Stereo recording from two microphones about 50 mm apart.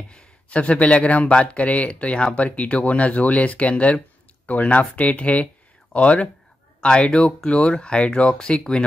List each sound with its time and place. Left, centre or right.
0.1 s speech: left